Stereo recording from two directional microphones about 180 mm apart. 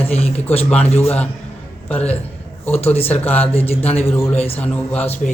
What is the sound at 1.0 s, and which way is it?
Speech, 10° left (ahead or behind).